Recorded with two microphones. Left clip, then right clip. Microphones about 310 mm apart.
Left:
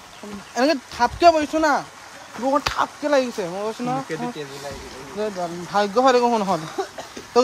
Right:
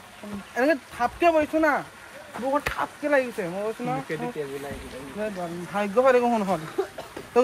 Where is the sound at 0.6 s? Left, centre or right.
Left.